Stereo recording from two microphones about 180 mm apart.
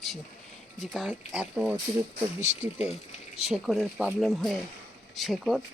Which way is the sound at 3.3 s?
5° right (ahead or behind).